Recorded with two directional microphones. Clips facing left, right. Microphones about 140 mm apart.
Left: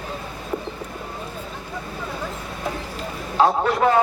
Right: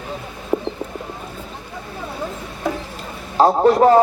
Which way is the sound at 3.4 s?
35° right (ahead or behind).